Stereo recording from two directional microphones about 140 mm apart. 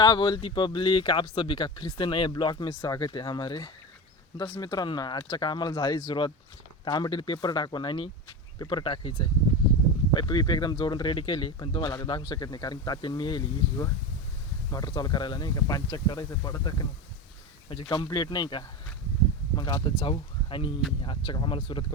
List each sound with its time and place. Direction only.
0.0 s speech: 30° left (ahead or behind)